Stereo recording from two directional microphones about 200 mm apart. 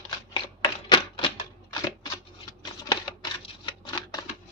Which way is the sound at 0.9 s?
25° left (ahead or behind).